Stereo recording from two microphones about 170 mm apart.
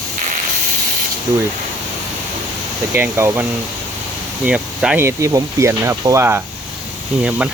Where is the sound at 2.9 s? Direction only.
15° right (ahead or behind).